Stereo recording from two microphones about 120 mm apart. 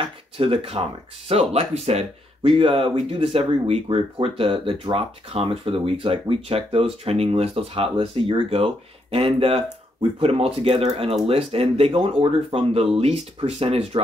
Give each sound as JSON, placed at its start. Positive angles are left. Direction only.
{"t": 0.4, "sound": "speech", "side_deg": -50}